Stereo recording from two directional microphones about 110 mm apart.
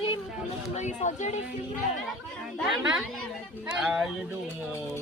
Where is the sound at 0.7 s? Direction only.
90° left.